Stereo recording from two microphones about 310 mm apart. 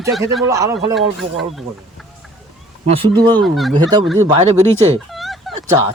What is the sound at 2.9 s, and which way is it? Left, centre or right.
Speech, centre.